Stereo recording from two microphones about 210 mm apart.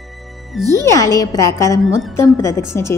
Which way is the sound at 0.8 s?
15° left (ahead or behind).